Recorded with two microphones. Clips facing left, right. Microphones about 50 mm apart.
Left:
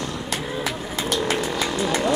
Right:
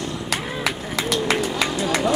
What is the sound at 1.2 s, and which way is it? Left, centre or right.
Vehicle, right.